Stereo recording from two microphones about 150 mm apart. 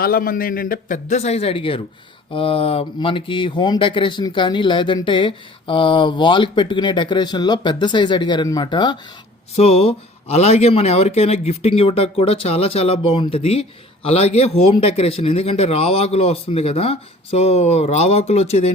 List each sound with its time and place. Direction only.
0.0 s speech: 75° left (ahead or behind); by 9.0 s 30° left (ahead or behind)
9.6 s a man's voice: 40° left (ahead or behind)